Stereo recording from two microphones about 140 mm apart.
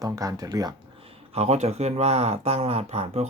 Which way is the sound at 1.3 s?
50° right (ahead or behind).